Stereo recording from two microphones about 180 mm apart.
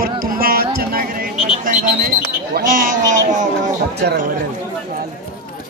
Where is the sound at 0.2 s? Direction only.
55° right (ahead or behind).